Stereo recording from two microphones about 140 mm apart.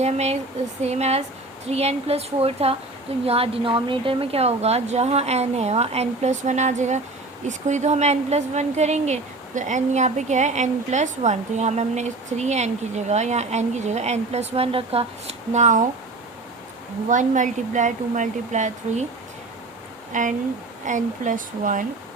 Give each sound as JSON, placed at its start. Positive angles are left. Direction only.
{"t": 0.0, "sound": "a woman's voice", "side_deg": -50}
{"t": 17.1, "sound": "a woman's voice", "side_deg": -65}
{"t": 20.1, "sound": "a woman's voice", "side_deg": -65}